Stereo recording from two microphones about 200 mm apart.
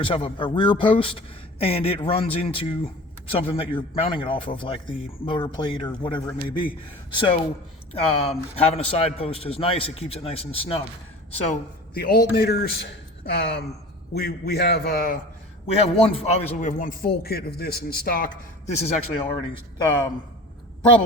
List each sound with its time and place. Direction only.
0.0 s a man's voice: 25° left (ahead or behind)
11.9 s a man's voice: 50° left (ahead or behind)
15.6 s a man's voice: 30° left (ahead or behind)